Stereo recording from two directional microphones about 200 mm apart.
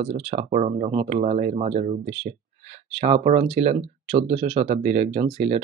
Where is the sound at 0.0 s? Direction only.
30° right (ahead or behind).